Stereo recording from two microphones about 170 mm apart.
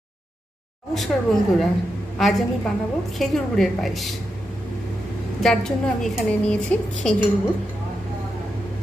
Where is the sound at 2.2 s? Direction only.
Centre (ahead or behind).